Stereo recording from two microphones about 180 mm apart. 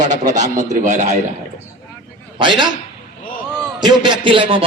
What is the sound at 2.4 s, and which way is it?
Speech, 25° right (ahead or behind).